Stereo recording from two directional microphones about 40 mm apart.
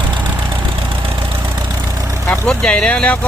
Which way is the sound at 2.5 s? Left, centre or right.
Left.